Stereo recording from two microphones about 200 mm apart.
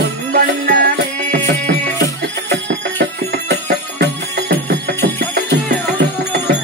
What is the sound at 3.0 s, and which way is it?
Music, 55° right (ahead or behind).